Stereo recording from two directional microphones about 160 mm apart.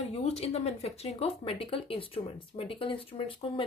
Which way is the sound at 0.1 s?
40° left (ahead or behind).